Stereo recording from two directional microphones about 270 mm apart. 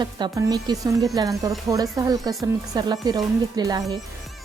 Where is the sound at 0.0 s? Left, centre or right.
Centre.